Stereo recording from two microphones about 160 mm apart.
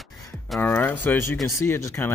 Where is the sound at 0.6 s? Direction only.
10° left (ahead or behind).